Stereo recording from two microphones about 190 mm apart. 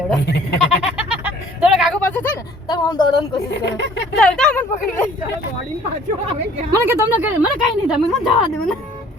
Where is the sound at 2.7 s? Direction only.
20° left (ahead or behind).